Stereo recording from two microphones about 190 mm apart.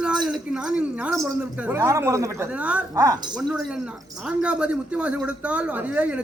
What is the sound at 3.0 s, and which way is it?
Speech, 20° right (ahead or behind).